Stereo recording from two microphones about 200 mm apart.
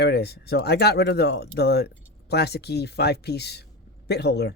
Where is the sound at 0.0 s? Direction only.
55° left (ahead or behind).